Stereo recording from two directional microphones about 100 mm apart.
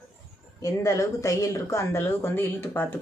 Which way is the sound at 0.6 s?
35° left (ahead or behind).